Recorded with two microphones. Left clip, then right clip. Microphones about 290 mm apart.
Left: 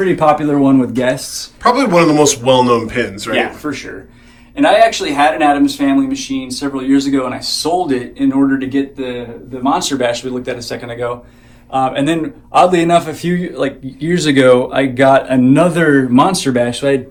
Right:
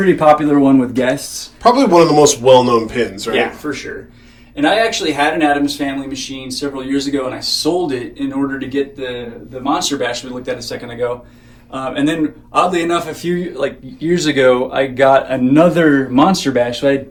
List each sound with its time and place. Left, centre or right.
0.0 s a man's voice: left
1.6 s a man's voice: centre
3.6 s a man's voice: left